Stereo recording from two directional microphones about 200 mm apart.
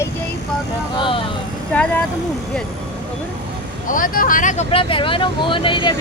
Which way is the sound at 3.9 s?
45° left (ahead or behind).